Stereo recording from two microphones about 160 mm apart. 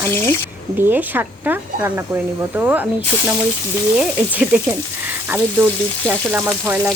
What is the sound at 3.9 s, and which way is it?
Speech, 10° right (ahead or behind).